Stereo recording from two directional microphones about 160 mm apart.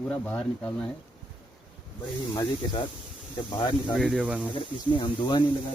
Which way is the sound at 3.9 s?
Centre (ahead or behind).